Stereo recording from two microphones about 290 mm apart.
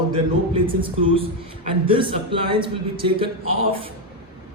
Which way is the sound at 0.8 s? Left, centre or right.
Centre.